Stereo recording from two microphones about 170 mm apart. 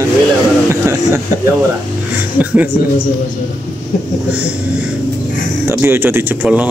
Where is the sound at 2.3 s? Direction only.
10° right (ahead or behind).